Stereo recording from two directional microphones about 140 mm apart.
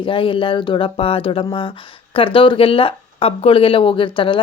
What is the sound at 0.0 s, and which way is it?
Speech, 40° left (ahead or behind).